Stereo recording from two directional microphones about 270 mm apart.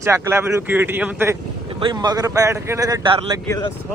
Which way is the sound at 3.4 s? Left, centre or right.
Centre.